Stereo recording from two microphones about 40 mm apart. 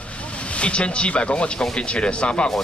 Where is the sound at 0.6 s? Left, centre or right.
Left.